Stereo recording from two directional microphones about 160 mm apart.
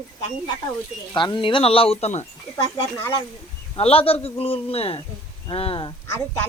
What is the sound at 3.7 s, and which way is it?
Speech, 35° left (ahead or behind).